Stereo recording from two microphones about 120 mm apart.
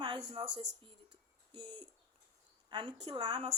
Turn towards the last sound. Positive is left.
turn(degrees=-40)  # may be behind; listen again after turning